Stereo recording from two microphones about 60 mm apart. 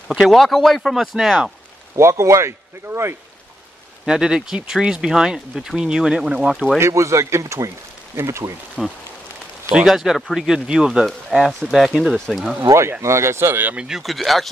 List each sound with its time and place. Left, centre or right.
0.2 s speech: centre
2.0 s speech: right
4.0 s speech: centre
6.8 s a man's voice: right
8.8 s speech: centre
13.0 s speech: right
13.7 s speech: centre